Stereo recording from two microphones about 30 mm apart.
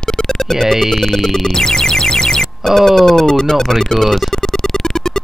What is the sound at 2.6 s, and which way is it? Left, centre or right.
Speech, centre.